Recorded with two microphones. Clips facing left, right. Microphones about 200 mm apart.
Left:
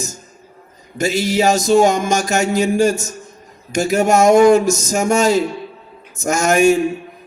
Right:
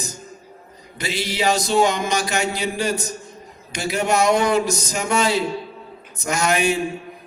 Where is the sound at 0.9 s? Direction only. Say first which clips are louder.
Left 8 dB; 45° left (ahead or behind).